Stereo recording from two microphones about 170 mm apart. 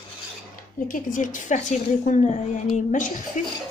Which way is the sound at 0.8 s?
50° left (ahead or behind).